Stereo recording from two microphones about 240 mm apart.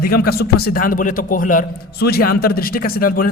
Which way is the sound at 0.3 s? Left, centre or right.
Left.